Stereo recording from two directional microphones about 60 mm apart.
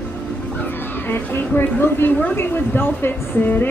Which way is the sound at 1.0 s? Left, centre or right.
Left.